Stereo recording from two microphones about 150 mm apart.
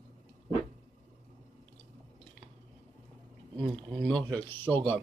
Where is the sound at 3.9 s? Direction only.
5° left (ahead or behind).